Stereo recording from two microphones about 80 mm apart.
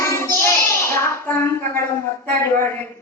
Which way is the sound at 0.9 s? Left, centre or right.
Left.